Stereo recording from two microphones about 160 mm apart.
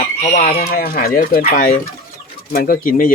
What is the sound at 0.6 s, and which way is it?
Speech, 60° left (ahead or behind).